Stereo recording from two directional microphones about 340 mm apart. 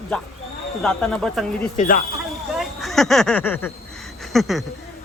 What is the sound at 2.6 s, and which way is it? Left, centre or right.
Speech, centre.